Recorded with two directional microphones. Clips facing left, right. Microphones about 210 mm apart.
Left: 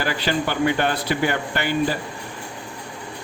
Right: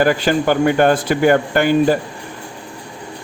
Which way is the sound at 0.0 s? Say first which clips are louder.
Right 8 dB; 50° right (ahead or behind).